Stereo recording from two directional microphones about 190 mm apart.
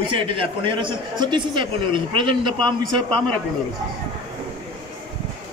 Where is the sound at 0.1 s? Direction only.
25° right (ahead or behind).